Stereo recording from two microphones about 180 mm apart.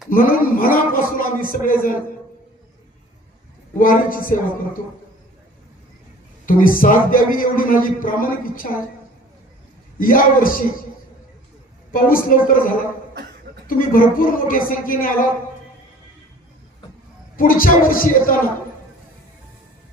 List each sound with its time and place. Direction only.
0.1 s a man's voice: 50° left (ahead or behind)
3.8 s a man's voice: 50° left (ahead or behind)
6.4 s a man's voice: 50° left (ahead or behind)
10.0 s a man's voice: 50° left (ahead or behind)
11.9 s a man's voice: 50° left (ahead or behind)
17.3 s a man's voice: 50° left (ahead or behind)